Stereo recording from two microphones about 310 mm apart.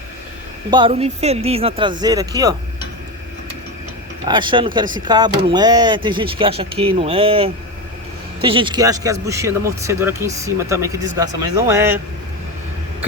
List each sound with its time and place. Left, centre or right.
0.7 s speech: centre
4.3 s speech: centre